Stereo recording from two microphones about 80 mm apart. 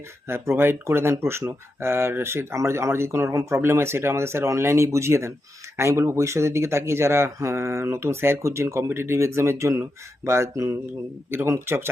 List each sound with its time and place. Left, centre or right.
0.3 s speech: right